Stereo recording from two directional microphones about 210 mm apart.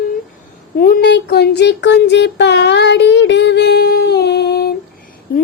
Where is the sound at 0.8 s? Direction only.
45° left (ahead or behind).